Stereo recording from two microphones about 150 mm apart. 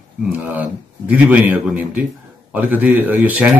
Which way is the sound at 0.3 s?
10° right (ahead or behind).